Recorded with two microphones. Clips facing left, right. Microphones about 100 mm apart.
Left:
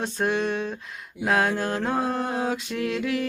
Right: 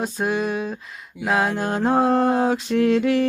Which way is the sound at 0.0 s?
5° right (ahead or behind).